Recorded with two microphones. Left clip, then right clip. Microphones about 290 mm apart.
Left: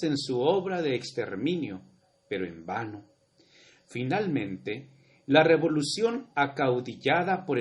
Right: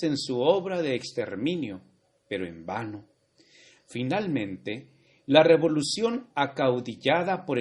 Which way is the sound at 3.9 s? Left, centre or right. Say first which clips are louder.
Even; centre.